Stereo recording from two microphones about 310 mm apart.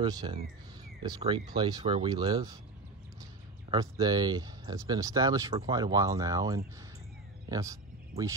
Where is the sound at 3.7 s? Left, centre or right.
Centre.